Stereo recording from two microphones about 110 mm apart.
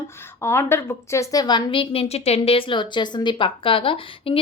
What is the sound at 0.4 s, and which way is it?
A woman's voice, 20° left (ahead or behind).